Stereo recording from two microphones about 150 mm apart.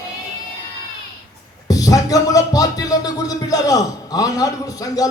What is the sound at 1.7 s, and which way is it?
Music, 25° left (ahead or behind).